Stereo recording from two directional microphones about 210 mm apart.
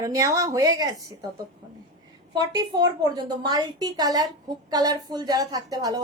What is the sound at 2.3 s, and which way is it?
A woman's voice, 20° right (ahead or behind).